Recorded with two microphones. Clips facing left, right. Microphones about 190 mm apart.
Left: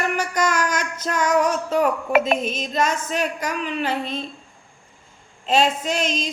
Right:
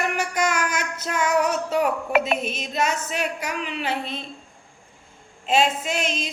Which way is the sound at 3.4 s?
10° right (ahead or behind).